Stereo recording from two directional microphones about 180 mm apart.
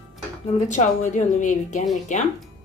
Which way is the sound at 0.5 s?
45° left (ahead or behind).